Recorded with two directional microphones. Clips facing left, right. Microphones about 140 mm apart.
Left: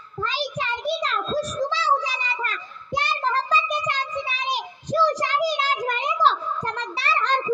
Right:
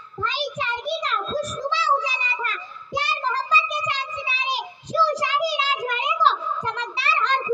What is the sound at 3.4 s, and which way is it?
Child singing, 45° left (ahead or behind).